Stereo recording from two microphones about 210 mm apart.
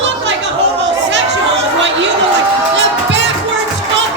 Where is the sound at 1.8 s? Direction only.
60° right (ahead or behind).